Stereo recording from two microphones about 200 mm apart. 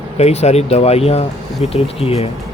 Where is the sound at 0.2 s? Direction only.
30° left (ahead or behind).